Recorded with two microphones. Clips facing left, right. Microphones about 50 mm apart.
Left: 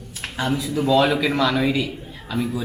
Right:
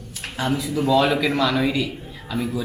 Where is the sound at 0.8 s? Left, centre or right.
Centre.